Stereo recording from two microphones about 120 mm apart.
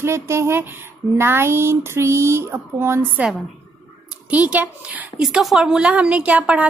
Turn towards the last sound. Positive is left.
turn(degrees=-10)  # may be behind; listen again after turning